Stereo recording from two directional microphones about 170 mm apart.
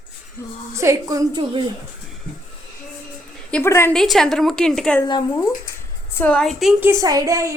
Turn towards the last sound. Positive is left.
turn(degrees=-20)  # may be behind; listen again after turning